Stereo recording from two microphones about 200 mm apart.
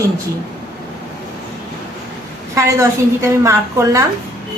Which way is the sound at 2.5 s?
15° right (ahead or behind).